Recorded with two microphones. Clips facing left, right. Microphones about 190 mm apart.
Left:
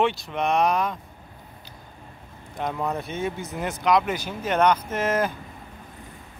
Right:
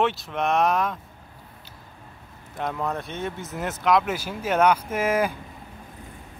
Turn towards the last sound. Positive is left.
turn(degrees=-10)  # may be behind; listen again after turning